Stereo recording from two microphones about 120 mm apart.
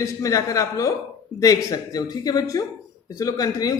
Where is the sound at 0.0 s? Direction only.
25° left (ahead or behind).